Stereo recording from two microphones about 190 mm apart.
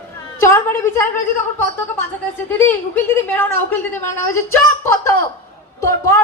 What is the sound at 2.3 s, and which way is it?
A woman's voice, 10° left (ahead or behind).